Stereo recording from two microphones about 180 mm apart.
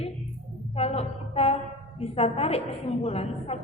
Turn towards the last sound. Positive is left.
turn(degrees=35)  # may be behind; listen again after turning